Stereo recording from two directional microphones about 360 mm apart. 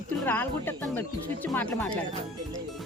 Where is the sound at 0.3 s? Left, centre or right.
Centre.